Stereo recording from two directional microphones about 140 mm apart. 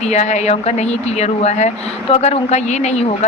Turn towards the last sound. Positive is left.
turn(degrees=50)  # may be behind; listen again after turning